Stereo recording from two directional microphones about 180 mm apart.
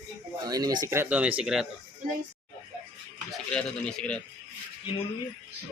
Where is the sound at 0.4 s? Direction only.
20° right (ahead or behind); by 1.6 s 5° right (ahead or behind).